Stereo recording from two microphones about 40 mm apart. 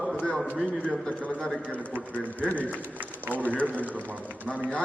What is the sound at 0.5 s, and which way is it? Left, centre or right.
Speech, left.